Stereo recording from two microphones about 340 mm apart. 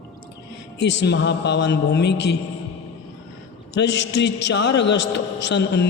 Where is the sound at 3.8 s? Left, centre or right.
Left.